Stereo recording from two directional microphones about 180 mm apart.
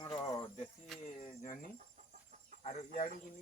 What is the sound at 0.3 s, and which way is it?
Cricket, 25° left (ahead or behind).